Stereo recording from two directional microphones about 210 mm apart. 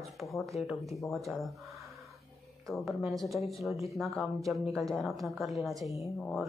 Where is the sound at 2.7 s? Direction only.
Centre (ahead or behind).